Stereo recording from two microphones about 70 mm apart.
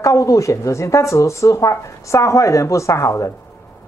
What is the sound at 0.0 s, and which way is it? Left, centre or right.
Speech, left.